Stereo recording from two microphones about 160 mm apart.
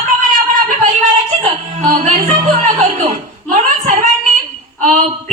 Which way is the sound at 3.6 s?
50° right (ahead or behind).